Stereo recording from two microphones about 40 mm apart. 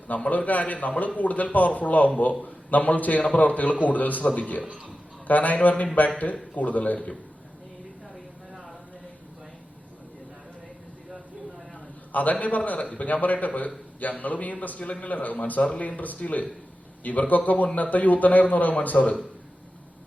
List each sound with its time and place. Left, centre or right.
0.1 s speech: left
12.1 s speech: left
15.6 s speech: left